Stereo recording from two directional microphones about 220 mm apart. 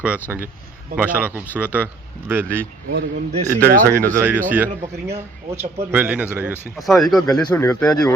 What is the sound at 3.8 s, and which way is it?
Speech, 15° right (ahead or behind).